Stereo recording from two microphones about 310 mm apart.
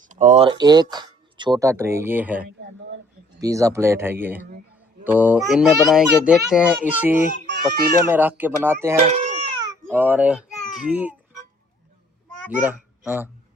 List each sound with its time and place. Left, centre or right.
0.0 s a child's voice: right; by 7.3 s centre
7.4 s baby cry: right
8.0 s speech: centre
9.0 s baby cry: right
9.8 s a child's voice: centre
10.8 s baby cry: centre
12.5 s a child's voice: centre